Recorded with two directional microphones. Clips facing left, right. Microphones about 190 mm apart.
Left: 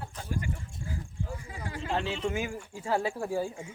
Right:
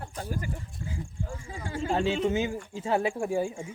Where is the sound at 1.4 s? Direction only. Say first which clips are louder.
Right 5 dB; 25° right (ahead or behind).